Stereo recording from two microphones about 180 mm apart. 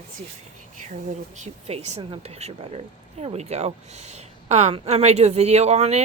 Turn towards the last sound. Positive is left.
turn(degrees=-35)  # may be behind; listen again after turning